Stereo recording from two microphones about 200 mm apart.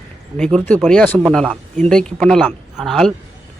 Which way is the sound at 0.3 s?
5° left (ahead or behind).